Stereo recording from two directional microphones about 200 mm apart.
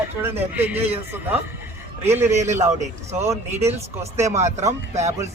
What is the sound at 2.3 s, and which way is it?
A man's voice, 35° right (ahead or behind).